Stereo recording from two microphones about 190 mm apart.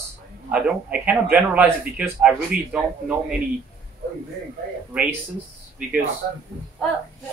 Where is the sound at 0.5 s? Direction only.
5° right (ahead or behind).